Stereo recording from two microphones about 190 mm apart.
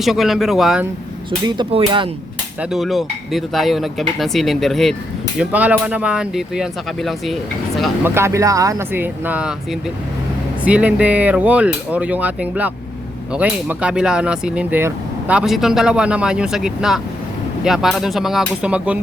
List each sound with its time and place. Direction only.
0.0 s speech: centre (ahead or behind)
1.5 s speech: 25° right (ahead or behind)
2.6 s speech: centre (ahead or behind)
8.0 s speech: 15° right (ahead or behind)
10.6 s speech: 5° right (ahead or behind)